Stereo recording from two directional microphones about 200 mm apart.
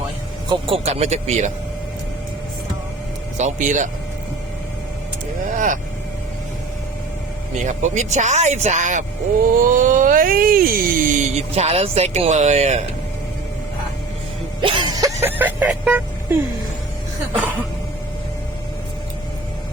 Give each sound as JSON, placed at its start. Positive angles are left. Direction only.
{"t": 0.4, "sound": "speech", "side_deg": -20}
{"t": 0.9, "sound": "speech", "side_deg": -35}
{"t": 3.3, "sound": "speech", "side_deg": -40}
{"t": 5.5, "sound": "speech", "side_deg": -40}
{"t": 7.6, "sound": "speech", "side_deg": -35}
{"t": 14.6, "sound": "vehicle", "side_deg": -25}